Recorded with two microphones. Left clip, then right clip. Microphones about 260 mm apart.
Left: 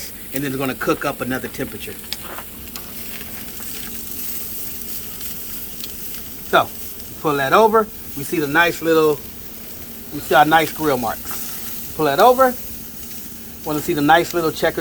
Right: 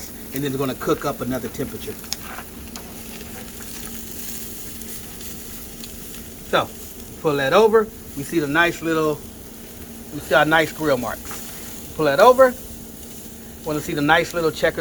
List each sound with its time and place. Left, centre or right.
0.3 s speech: centre
7.2 s speech: left
10.2 s speech: left
13.7 s speech: left